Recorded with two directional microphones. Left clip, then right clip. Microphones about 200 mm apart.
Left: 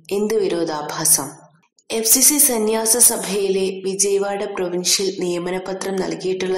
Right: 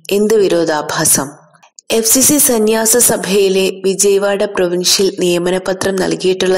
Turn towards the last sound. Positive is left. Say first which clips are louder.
# right 9 dB
turn(degrees=-30)  # may be behind; listen again after turning